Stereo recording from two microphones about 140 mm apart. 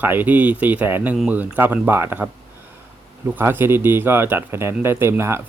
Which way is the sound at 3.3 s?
15° right (ahead or behind).